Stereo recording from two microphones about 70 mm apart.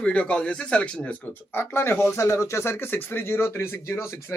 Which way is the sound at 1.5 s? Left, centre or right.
Left.